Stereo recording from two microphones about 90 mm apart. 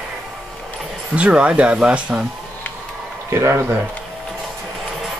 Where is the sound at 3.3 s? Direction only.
30° right (ahead or behind).